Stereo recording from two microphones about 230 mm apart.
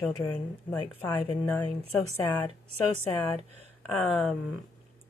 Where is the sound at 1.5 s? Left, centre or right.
Centre.